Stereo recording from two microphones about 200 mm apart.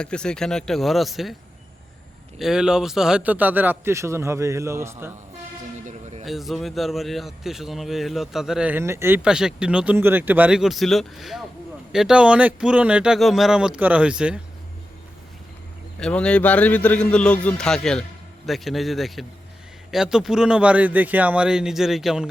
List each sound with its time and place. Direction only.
0.0 s speech: 5° left (ahead or behind)
2.4 s a man's voice: 5° right (ahead or behind)
5.8 s a sound: 35° right (ahead or behind)
6.2 s speech: centre (ahead or behind)
16.0 s speech: 5° left (ahead or behind)